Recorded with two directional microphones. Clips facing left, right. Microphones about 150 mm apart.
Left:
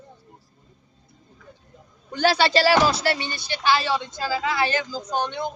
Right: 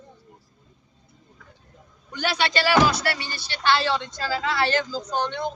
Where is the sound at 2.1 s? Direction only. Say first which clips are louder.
Left 5 dB; 30° left (ahead or behind).